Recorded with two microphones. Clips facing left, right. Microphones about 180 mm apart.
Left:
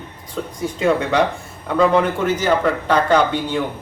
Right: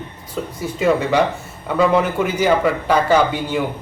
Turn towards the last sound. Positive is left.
turn(degrees=-5)  # may be behind; listen again after turning